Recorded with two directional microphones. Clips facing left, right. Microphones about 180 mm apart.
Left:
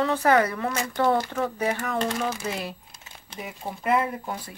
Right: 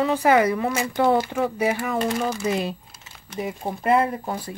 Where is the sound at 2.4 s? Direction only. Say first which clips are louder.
Right 7 dB; 20° right (ahead or behind).